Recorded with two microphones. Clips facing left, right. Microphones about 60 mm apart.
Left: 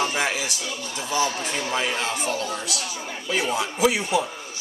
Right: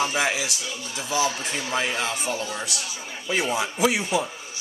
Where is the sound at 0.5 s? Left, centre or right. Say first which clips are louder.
Left 2 dB; left.